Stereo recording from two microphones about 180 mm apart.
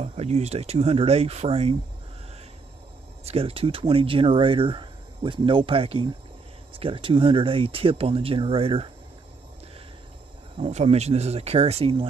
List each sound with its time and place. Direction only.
0.0 s speech: 35° right (ahead or behind)
3.3 s speech: 35° right (ahead or behind)
10.6 s speech: 35° right (ahead or behind)